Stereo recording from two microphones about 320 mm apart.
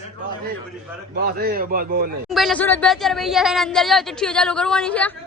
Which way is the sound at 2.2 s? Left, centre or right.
Centre.